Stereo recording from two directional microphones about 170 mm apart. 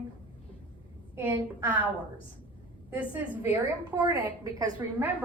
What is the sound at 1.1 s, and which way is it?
Speech, 15° right (ahead or behind).